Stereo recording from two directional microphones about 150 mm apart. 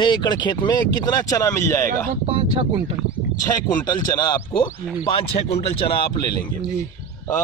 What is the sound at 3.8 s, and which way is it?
Speech, 30° left (ahead or behind).